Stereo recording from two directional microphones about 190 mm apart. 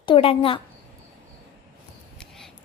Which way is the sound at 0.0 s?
30° left (ahead or behind).